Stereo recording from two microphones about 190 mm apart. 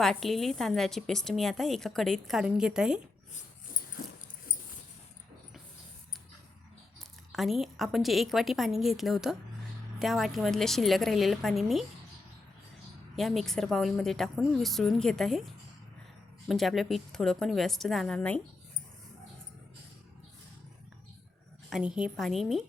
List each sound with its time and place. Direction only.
0.0 s a woman's voice: centre (ahead or behind)
4.0 s dog: 50° left (ahead or behind)
7.3 s a woman's voice: centre (ahead or behind)
13.1 s a woman's voice: centre (ahead or behind)
16.5 s a woman's voice: centre (ahead or behind)
21.7 s a woman's voice: 5° right (ahead or behind)